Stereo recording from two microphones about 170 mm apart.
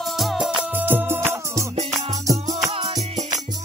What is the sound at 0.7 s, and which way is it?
Music, 10° right (ahead or behind).